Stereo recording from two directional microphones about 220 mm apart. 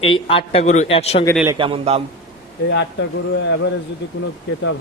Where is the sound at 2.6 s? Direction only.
55° left (ahead or behind).